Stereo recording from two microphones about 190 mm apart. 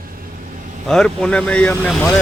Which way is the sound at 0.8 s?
5° left (ahead or behind).